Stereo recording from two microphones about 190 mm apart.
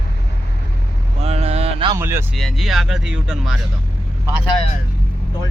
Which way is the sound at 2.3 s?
Centre (ahead or behind).